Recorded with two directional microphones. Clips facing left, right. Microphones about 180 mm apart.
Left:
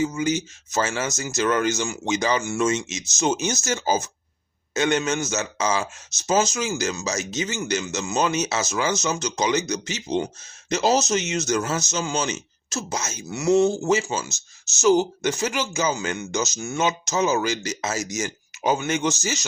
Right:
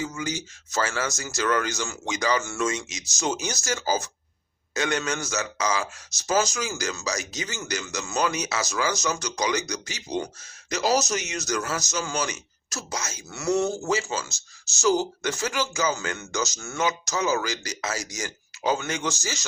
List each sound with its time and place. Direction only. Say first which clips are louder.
0.0 s speech: left 7 dB; 20° left (ahead or behind)